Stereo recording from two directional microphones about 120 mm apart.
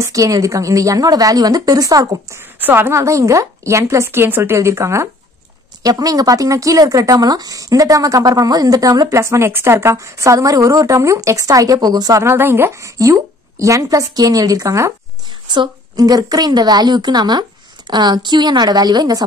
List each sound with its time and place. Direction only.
0.0 s speech: 30° right (ahead or behind)
2.6 s speech: 20° right (ahead or behind)
15.4 s a woman's voice: 40° right (ahead or behind)